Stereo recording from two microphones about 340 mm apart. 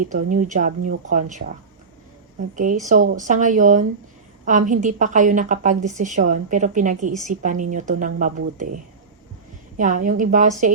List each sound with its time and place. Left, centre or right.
0.0 s a woman's voice: right
2.6 s a woman's voice: right
9.7 s a woman's voice: right